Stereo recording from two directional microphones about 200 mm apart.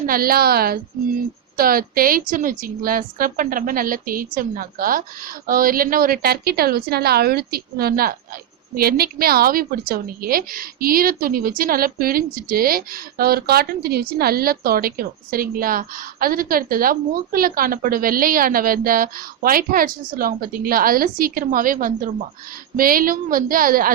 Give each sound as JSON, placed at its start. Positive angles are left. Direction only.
{"t": 0.0, "sound": "a woman's voice", "side_deg": -45}